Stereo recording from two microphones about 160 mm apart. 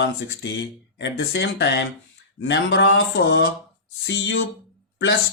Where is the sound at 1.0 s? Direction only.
90° left.